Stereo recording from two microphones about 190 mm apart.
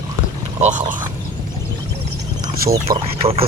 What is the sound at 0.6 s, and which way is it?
Speech, 40° right (ahead or behind).